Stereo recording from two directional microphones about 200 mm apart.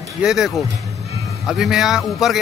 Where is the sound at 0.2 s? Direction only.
Centre (ahead or behind).